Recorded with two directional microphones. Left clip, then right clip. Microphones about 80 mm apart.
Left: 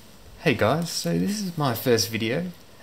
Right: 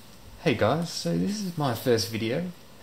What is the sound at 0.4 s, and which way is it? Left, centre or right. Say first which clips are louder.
Speech: left 2 dB; left.